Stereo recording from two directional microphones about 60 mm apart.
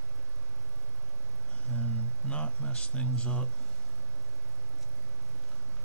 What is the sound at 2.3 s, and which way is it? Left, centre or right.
Speech, centre.